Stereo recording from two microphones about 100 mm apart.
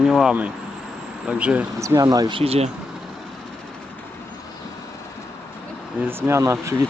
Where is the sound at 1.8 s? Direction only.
35° right (ahead or behind).